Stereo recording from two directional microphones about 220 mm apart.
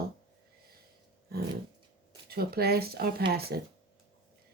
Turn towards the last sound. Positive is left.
turn(degrees=-45)  # may be behind; listen again after turning